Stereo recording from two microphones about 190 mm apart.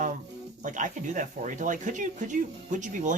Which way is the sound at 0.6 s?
40° right (ahead or behind).